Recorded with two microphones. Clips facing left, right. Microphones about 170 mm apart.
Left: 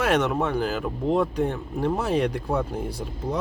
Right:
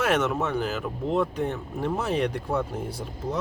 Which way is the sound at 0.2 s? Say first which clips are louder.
Left 2 dB; 35° left (ahead or behind).